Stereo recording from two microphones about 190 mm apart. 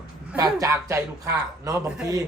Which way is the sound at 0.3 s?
15° right (ahead or behind).